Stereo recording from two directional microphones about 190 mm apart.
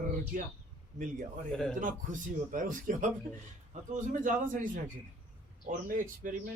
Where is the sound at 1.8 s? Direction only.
45° right (ahead or behind).